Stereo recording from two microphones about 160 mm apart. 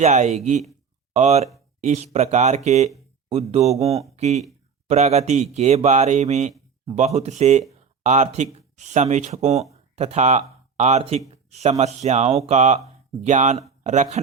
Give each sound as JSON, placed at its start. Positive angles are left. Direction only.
{"t": 0.0, "sound": "speech", "side_deg": -45}